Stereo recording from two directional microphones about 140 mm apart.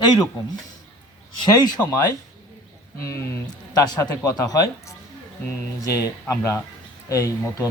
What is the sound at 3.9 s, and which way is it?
Speech, 25° left (ahead or behind).